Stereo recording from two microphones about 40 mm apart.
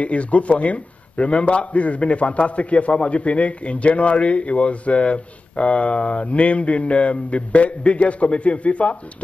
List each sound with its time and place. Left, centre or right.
0.0 s a man's voice: left